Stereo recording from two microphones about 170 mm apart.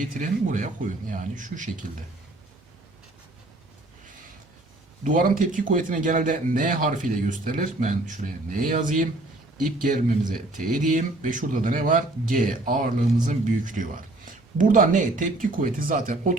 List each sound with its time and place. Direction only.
0.1 s speech: 50° right (ahead or behind)
5.4 s speech: 50° right (ahead or behind)